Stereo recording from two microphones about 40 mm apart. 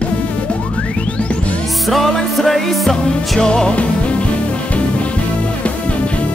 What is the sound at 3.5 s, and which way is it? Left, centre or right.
Music, left.